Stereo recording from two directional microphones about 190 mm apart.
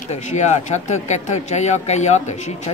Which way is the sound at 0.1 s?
40° left (ahead or behind).